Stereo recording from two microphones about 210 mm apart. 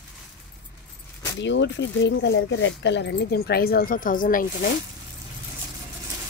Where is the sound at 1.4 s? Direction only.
60° left (ahead or behind); by 4.7 s 40° left (ahead or behind).